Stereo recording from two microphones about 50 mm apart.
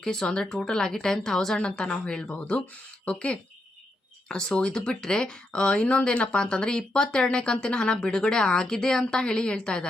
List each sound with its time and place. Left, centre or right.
0.0 s speech: centre